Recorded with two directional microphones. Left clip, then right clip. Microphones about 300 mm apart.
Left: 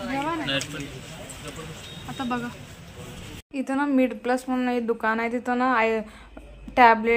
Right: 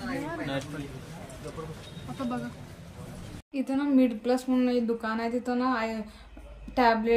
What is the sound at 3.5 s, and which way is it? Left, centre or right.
Speech, centre.